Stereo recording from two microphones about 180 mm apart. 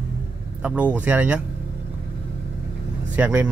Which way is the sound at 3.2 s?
10° right (ahead or behind).